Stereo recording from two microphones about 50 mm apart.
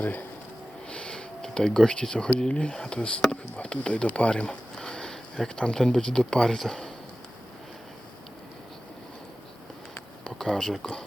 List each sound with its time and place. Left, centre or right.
0.0 s speech: left
0.9 s a sound: centre
2.4 s speech: left
3.9 s a sound: left
5.5 s speech: centre
10.3 s speech: centre